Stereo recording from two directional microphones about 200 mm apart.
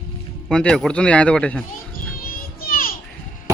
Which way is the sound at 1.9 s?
45° left (ahead or behind).